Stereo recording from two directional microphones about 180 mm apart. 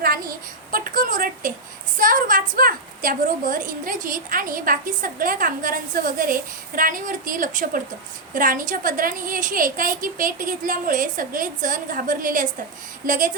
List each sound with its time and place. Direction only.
0.7 s a woman's voice: 50° right (ahead or behind)